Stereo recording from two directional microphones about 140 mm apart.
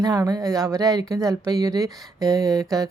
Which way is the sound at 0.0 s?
25° right (ahead or behind).